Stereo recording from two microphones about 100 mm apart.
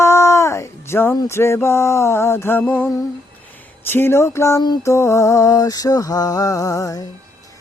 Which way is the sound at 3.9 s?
20° left (ahead or behind).